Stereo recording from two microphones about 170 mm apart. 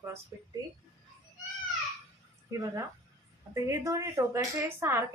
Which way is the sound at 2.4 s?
20° right (ahead or behind).